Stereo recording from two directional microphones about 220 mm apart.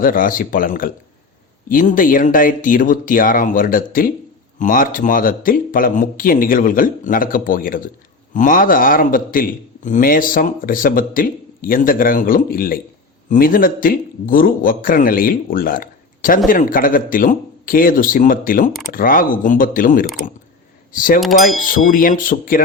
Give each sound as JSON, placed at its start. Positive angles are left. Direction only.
{"t": 0.0, "sound": "a man's voice", "side_deg": 40}
{"t": 21.2, "sound": "a sound", "side_deg": 0}
{"t": 21.8, "sound": "a man's voice", "side_deg": 40}